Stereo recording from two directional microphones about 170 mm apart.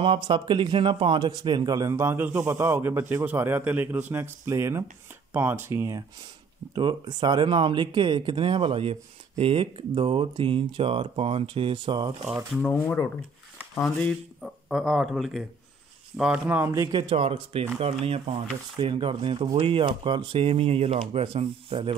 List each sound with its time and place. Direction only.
0.0 s a man's voice: 30° right (ahead or behind)
12.6 s speech: 10° left (ahead or behind); by 21.9 s 35° right (ahead or behind)